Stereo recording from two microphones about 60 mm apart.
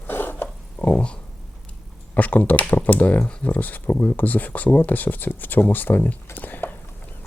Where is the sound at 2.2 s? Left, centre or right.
Left.